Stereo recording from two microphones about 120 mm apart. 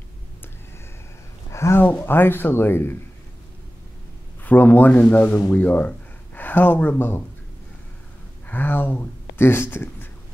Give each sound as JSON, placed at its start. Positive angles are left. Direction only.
{"t": 1.5, "sound": "speech", "side_deg": 20}
{"t": 4.4, "sound": "speech", "side_deg": 15}
{"t": 8.5, "sound": "speech", "side_deg": 15}